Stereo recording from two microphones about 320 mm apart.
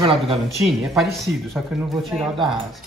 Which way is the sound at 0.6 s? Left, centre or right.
Centre.